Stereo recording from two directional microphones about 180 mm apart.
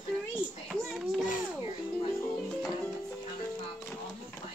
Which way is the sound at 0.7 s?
Centre (ahead or behind).